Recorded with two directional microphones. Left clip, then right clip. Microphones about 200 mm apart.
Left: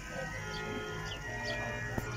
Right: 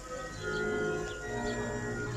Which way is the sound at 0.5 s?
50° right (ahead or behind).